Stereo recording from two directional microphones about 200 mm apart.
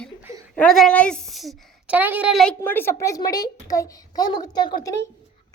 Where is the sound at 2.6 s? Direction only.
10° left (ahead or behind).